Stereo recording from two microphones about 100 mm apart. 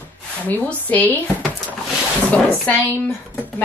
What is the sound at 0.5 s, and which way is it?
Speech, 15° left (ahead or behind).